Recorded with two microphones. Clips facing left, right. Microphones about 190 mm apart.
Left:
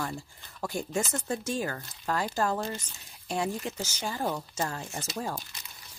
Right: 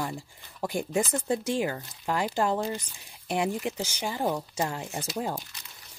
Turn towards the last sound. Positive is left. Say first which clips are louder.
# right 3 dB
turn(degrees=-15)  # may be behind; listen again after turning